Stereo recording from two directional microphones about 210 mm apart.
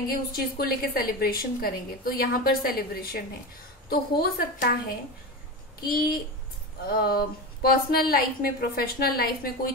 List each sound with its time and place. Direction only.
0.1 s a woman's voice: 45° left (ahead or behind)
5.8 s a woman's voice: 45° left (ahead or behind)